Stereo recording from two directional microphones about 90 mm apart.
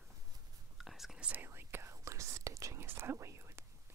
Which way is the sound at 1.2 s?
25° right (ahead or behind).